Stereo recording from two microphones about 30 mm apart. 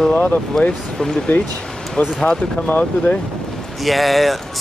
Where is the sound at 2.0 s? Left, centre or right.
Left.